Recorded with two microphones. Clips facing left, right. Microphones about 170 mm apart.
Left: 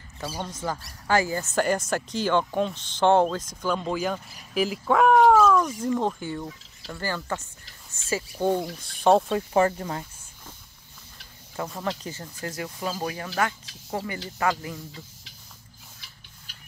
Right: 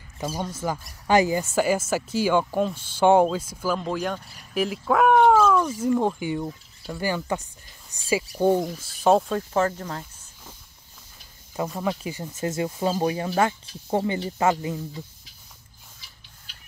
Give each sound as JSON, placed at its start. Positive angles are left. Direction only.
{"t": 0.4, "sound": "speech", "side_deg": -10}
{"t": 9.5, "sound": "speech", "side_deg": 10}
{"t": 11.7, "sound": "speech", "side_deg": -5}